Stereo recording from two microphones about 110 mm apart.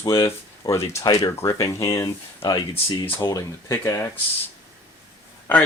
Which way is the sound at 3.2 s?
30° left (ahead or behind).